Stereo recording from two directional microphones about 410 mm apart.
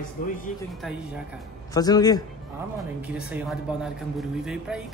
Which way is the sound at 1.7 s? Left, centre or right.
Centre.